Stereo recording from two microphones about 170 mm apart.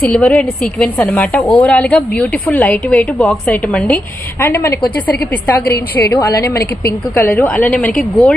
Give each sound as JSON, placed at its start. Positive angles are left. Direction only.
{"t": 0.0, "sound": "a woman's voice", "side_deg": 10}